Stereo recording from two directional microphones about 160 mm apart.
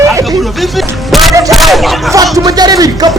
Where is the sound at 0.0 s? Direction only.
20° right (ahead or behind).